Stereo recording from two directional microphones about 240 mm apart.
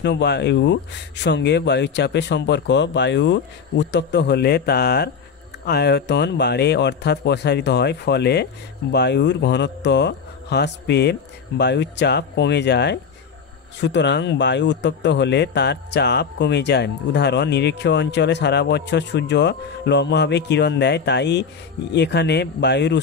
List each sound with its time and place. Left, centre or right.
0.0 s speech: left